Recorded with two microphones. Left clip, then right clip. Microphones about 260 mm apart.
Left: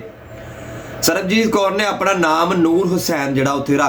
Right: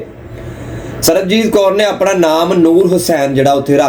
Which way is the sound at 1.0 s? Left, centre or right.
Centre.